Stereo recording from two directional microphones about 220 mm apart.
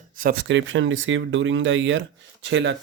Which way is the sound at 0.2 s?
40° right (ahead or behind).